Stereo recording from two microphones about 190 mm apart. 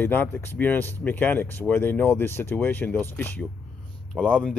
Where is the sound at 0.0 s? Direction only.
10° left (ahead or behind).